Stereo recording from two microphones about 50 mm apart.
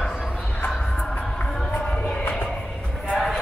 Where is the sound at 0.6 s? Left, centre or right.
Left.